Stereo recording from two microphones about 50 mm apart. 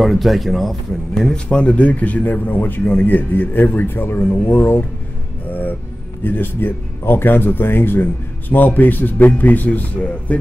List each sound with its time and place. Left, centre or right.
0.0 s speech: centre
1.1 s speech: centre